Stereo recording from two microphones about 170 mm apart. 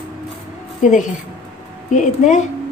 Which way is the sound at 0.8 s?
45° left (ahead or behind).